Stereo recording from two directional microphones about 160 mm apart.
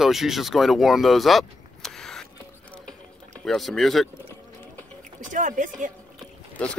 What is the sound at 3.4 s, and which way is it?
Speech, centre (ahead or behind).